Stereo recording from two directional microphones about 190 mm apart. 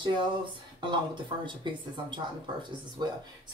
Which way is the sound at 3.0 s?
20° right (ahead or behind).